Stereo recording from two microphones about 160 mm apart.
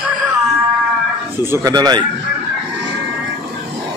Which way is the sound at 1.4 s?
20° right (ahead or behind).